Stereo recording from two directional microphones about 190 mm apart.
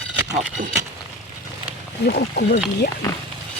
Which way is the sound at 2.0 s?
55° left (ahead or behind).